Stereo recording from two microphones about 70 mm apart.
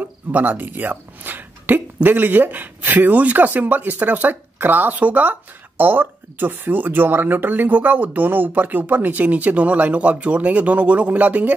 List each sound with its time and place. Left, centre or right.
0.0 s speech: right